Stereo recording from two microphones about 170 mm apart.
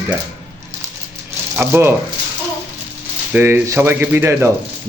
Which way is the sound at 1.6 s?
15° right (ahead or behind).